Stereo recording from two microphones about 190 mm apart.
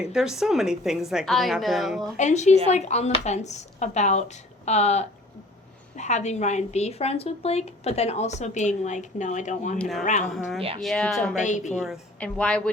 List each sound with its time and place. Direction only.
0.0 s speech: 5° right (ahead or behind)
2.1 s speech: 40° left (ahead or behind)
10.8 s speech: centre (ahead or behind)
11.3 s speech: 40° left (ahead or behind)
11.8 s speech: centre (ahead or behind)